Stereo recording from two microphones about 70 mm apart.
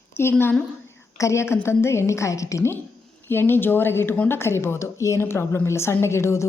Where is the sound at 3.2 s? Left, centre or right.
Left.